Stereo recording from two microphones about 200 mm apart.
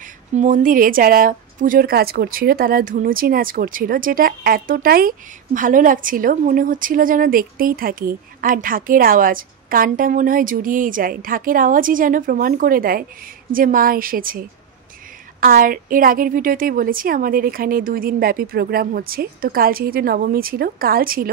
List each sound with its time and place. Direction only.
0.0 s a woman's voice: 40° right (ahead or behind)
15.4 s a woman's voice: 45° right (ahead or behind)